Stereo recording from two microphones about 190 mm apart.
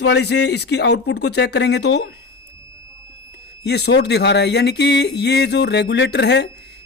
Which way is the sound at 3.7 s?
60° left (ahead or behind).